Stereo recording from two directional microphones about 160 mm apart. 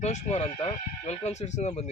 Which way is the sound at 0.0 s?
40° left (ahead or behind).